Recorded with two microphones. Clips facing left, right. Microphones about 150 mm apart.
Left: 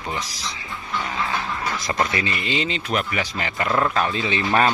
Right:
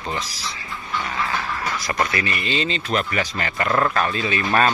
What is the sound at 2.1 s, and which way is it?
Speech, 20° left (ahead or behind).